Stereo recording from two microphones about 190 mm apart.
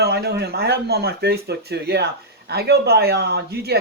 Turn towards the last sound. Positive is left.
turn(degrees=-60)  # may be behind; listen again after turning